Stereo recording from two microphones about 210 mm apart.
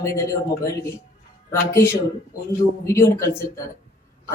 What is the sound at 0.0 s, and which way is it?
Speech, 15° left (ahead or behind).